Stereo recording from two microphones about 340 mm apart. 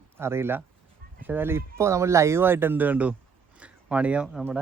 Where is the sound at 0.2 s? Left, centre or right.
Centre.